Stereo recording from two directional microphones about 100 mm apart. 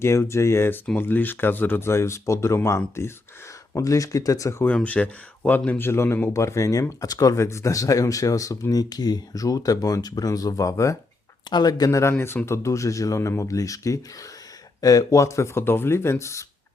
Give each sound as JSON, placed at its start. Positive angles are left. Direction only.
{"t": 0.0, "sound": "speech", "side_deg": 25}
{"t": 4.6, "sound": "speech", "side_deg": 15}